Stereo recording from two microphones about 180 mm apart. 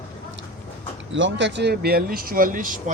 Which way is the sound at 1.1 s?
85° right.